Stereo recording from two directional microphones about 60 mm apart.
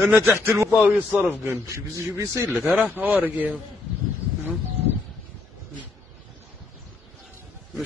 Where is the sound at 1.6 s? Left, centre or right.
Right.